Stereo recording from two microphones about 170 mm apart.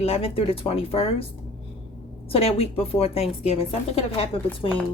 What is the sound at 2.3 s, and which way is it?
A woman's voice, 35° left (ahead or behind).